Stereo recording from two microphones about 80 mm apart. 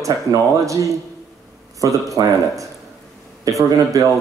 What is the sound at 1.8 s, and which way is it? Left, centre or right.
Speech, right.